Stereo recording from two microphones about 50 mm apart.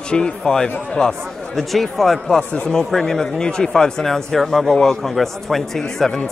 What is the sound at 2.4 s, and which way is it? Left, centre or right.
Speech, left.